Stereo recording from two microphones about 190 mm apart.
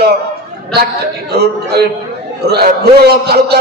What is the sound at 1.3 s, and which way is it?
A man's voice, 60° right (ahead or behind).